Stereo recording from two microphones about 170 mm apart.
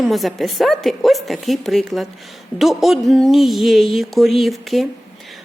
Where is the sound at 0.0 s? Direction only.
Centre (ahead or behind).